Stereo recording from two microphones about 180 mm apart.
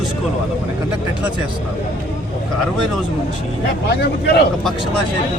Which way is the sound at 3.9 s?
65° left (ahead or behind).